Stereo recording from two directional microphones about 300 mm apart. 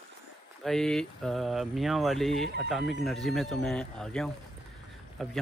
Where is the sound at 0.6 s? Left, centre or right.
Centre.